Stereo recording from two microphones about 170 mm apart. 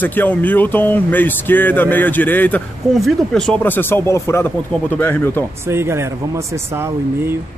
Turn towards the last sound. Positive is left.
turn(degrees=-15)  # may be behind; listen again after turning